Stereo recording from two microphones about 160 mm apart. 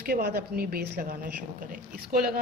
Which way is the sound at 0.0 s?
75° right (ahead or behind).